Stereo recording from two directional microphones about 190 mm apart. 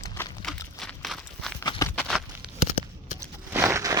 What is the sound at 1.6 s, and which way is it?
Clip-clop, 20° left (ahead or behind).